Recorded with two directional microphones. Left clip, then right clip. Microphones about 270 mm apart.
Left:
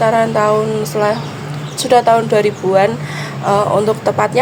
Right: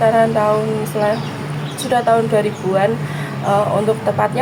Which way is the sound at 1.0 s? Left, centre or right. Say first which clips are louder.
Left 1 dB; left.